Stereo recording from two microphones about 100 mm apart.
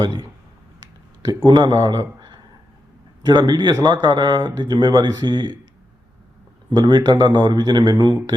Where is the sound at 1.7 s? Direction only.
35° right (ahead or behind).